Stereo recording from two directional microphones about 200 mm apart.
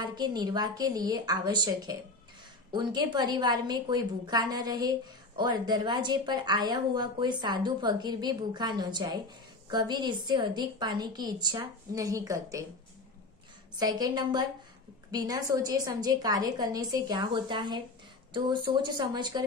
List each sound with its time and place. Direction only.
0.0 s a woman's voice: 20° right (ahead or behind)
13.7 s a woman's voice: 20° right (ahead or behind)